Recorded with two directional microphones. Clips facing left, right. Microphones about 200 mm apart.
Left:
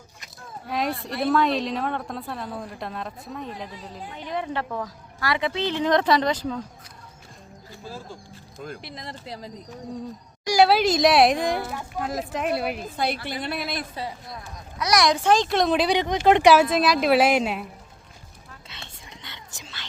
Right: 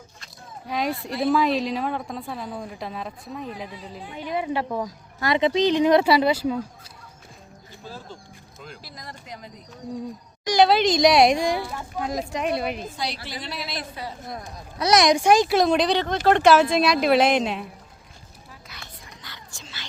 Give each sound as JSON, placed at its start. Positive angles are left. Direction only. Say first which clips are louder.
{"t": 0.7, "sound": "a woman's voice", "louder": "right 1 dB", "side_deg": 0}
{"t": 7.9, "sound": "speech", "louder": "left 1 dB", "side_deg": 10}
{"t": 8.8, "sound": "speech", "louder": "left 4 dB", "side_deg": 25}
{"t": 10.4, "sound": "a woman's voice", "louder": "even", "side_deg": 10}
{"t": 13.0, "sound": "a woman's voice", "louder": "left 5 dB", "side_deg": 55}
{"t": 14.8, "sound": "a woman's voice", "louder": "right 3 dB", "side_deg": -25}
{"t": 15.9, "sound": "speech", "louder": "left 1 dB", "side_deg": 15}
{"t": 18.7, "sound": "whispering", "louder": "left 2 dB", "side_deg": 25}